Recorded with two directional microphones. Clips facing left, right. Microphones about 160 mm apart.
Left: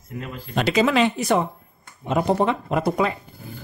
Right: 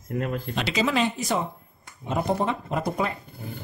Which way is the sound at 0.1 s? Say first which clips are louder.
Right 6 dB; 50° right (ahead or behind).